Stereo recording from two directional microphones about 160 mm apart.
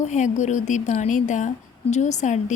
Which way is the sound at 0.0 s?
45° left (ahead or behind).